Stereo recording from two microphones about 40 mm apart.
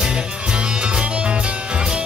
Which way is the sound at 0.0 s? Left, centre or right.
Right.